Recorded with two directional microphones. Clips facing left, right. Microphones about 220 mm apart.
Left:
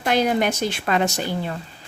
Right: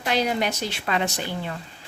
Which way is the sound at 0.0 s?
50° left (ahead or behind).